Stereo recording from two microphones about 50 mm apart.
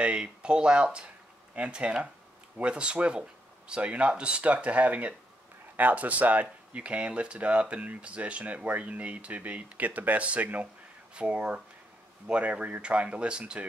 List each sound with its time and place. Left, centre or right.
0.0 s speech: right